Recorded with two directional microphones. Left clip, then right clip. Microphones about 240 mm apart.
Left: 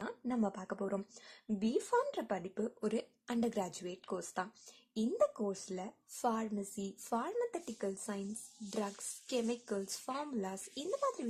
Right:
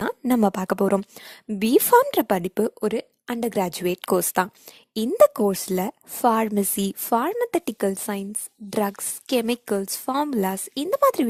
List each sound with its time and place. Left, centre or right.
0.0 s a woman's voice: right